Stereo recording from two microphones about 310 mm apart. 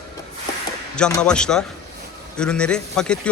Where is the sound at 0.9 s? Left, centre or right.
Centre.